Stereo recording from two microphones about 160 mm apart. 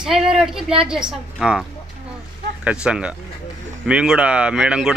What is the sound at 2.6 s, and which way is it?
A woman's voice, 5° right (ahead or behind).